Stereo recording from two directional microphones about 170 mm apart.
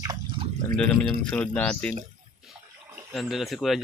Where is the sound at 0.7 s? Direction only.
5° left (ahead or behind).